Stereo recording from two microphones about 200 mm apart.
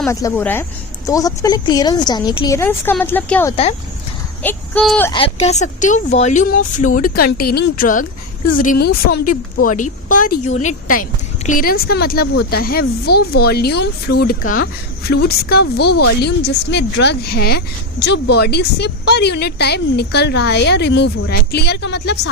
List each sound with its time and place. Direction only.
0.1 s a woman's voice: 15° left (ahead or behind)
3.5 s speech: 30° left (ahead or behind)
4.4 s a woman's voice: 5° left (ahead or behind)
5.1 s speech: 30° left (ahead or behind); by 22.3 s 60° left (ahead or behind)